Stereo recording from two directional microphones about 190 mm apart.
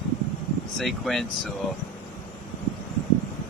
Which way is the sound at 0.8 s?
Centre (ahead or behind).